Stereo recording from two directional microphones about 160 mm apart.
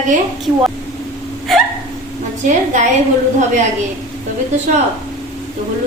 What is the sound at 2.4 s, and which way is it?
Speech, 50° right (ahead or behind).